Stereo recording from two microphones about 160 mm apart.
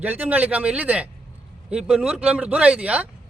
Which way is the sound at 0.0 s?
10° right (ahead or behind).